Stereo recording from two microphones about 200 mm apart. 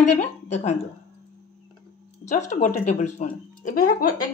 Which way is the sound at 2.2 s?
35° left (ahead or behind).